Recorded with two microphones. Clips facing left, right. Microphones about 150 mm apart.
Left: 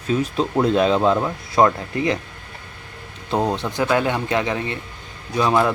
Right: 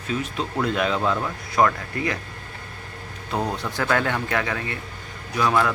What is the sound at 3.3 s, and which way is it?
Speech, 25° left (ahead or behind).